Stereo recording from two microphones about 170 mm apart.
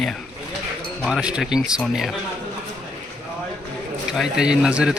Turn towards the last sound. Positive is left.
turn(degrees=-5)  # may be behind; listen again after turning